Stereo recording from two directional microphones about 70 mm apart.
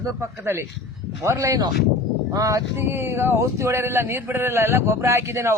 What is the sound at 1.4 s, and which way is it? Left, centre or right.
Speech, right.